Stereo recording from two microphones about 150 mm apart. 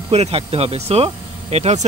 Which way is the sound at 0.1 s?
40° right (ahead or behind).